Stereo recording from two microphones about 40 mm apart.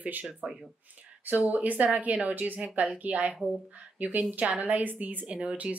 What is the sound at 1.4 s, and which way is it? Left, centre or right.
A woman's voice, right.